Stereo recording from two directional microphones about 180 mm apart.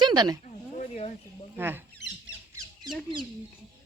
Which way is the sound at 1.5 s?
10° right (ahead or behind).